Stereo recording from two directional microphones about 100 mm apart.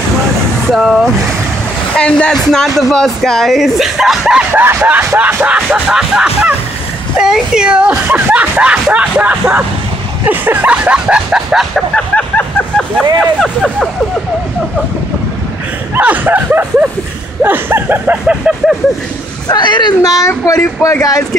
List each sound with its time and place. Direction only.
0.7 s speech: centre (ahead or behind)
2.0 s speech: 10° left (ahead or behind); by 4.5 s 5° right (ahead or behind)
4.6 s music: 20° right (ahead or behind); by 11.8 s 5° right (ahead or behind)
11.9 s vehicle: 10° left (ahead or behind)
13.2 s speech: 5° left (ahead or behind)
16.0 s music: 15° right (ahead or behind)
17.4 s a sound: 20° right (ahead or behind)
19.4 s speech: 45° left (ahead or behind)